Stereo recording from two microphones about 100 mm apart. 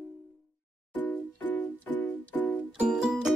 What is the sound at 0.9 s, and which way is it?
Music, 20° left (ahead or behind).